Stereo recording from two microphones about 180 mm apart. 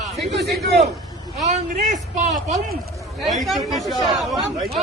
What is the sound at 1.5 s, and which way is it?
A man's voice, 45° right (ahead or behind).